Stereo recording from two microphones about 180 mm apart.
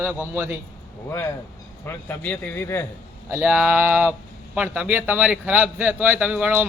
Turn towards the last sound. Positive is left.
turn(degrees=-10)  # may be behind; listen again after turning